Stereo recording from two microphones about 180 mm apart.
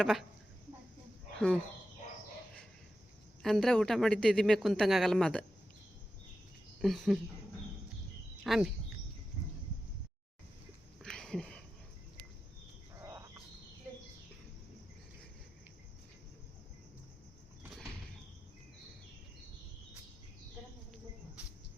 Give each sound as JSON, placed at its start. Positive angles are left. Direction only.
{"t": 0.0, "sound": "a man's voice", "side_deg": 0}
{"t": 3.4, "sound": "a man's voice", "side_deg": 0}
{"t": 6.8, "sound": "a man's voice", "side_deg": 0}
{"t": 8.4, "sound": "a man's voice", "side_deg": 0}
{"t": 11.0, "sound": "a sound", "side_deg": 5}
{"t": 13.0, "sound": "cricket", "side_deg": -15}